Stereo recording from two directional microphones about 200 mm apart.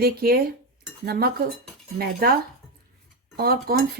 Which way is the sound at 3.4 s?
50° right (ahead or behind).